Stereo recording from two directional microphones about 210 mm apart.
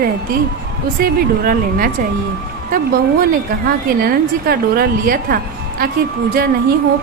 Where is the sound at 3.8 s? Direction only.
45° right (ahead or behind).